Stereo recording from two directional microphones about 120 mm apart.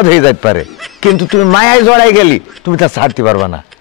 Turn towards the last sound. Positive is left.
turn(degrees=35)  # may be behind; listen again after turning